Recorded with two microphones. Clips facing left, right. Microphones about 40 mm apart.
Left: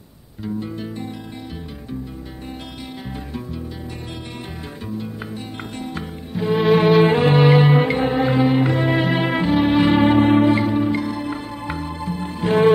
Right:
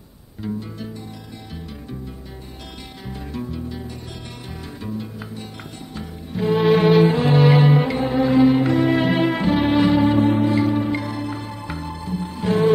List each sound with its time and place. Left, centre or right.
0.6 s music: left
3.3 s music: centre
6.3 s music: centre
7.1 s music: left
8.0 s music: left
8.4 s music: centre
9.8 s music: left
10.6 s music: centre
11.2 s music: centre